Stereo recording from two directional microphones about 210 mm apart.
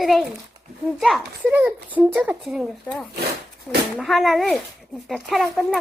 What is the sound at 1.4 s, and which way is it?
A woman's voice, 5° right (ahead or behind).